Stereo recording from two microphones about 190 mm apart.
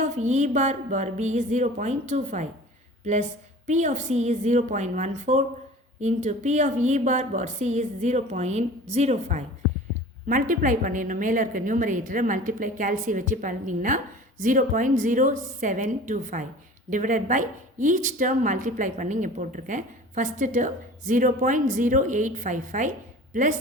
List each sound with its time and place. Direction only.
0.0 s a woman's voice: 40° right (ahead or behind)